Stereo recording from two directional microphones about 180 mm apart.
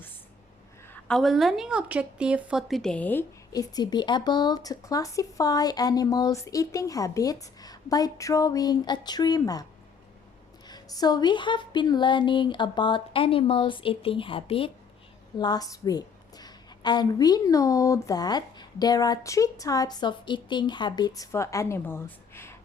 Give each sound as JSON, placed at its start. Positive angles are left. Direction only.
{"t": 1.0, "sound": "a woman's voice", "side_deg": 0}
{"t": 10.7, "sound": "a woman's voice", "side_deg": 20}